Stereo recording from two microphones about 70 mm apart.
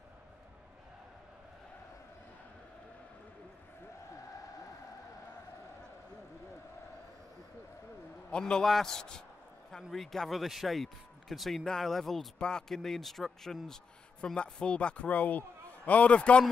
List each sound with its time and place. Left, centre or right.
8.3 s a man's voice: centre